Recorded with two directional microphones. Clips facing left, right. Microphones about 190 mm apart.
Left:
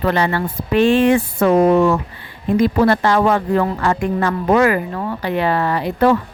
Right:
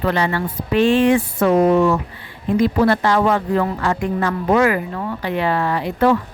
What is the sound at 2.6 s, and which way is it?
A woman's voice, 50° left (ahead or behind).